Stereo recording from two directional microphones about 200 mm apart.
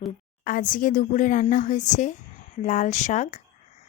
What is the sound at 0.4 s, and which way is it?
A woman's voice, 45° left (ahead or behind).